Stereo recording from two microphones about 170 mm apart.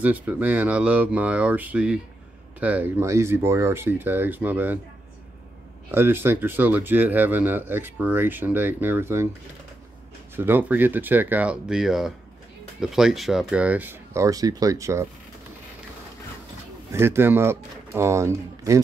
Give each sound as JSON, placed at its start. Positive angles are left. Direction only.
{"t": 0.0, "sound": "speech", "side_deg": -10}
{"t": 5.9, "sound": "speech", "side_deg": -10}
{"t": 10.3, "sound": "speech", "side_deg": -10}
{"t": 16.9, "sound": "speech", "side_deg": -15}